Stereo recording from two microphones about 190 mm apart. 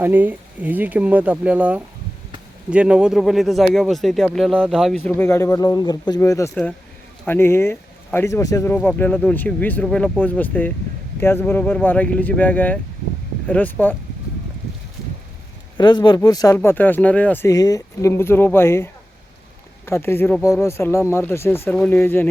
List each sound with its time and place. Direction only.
0.0 s speech: 10° right (ahead or behind); by 13.9 s 10° left (ahead or behind)
15.8 s speech: 25° left (ahead or behind)